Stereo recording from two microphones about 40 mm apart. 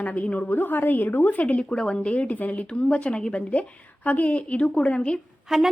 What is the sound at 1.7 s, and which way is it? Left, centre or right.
Speech, left.